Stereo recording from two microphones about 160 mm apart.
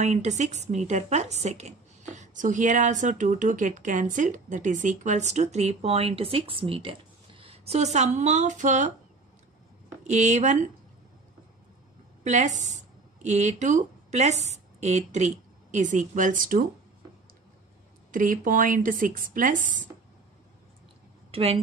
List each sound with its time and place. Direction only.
0.0 s a woman's voice: 45° right (ahead or behind)
10.0 s a woman's voice: 45° right (ahead or behind)
12.2 s speech: 50° right (ahead or behind)
18.1 s speech: 55° right (ahead or behind)
21.3 s speech: 40° right (ahead or behind)